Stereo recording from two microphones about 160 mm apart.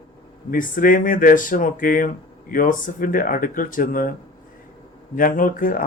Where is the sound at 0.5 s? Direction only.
55° left (ahead or behind).